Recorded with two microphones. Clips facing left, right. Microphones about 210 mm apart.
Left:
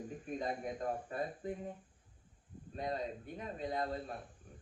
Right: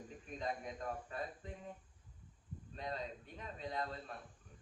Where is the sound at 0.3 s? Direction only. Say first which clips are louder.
Left 3 dB; 35° left (ahead or behind).